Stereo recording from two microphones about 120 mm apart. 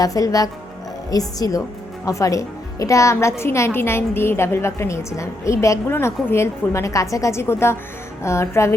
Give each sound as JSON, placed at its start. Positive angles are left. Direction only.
{"t": 0.0, "sound": "a woman's voice", "side_deg": 30}